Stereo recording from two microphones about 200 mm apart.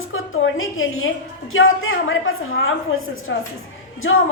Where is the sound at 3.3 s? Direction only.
65° left (ahead or behind).